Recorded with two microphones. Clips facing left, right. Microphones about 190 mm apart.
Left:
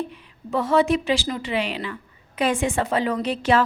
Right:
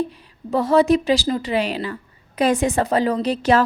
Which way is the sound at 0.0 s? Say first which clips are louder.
Right 5 dB; 35° right (ahead or behind).